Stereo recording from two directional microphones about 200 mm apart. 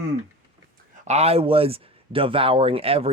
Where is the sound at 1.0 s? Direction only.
30° right (ahead or behind).